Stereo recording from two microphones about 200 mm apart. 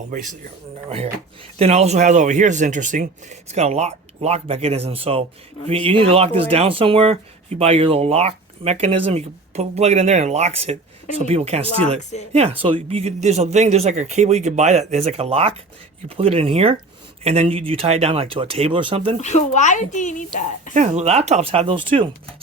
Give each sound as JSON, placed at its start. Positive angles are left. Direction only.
{"t": 0.4, "sound": "speech", "side_deg": -30}
{"t": 19.2, "sound": "speech", "side_deg": 35}
{"t": 20.7, "sound": "speech", "side_deg": -35}